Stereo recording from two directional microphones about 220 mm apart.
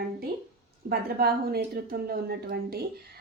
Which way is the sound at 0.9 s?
45° right (ahead or behind).